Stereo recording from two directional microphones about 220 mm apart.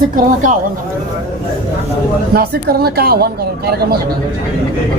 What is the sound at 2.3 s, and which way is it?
A woman's voice, 45° right (ahead or behind).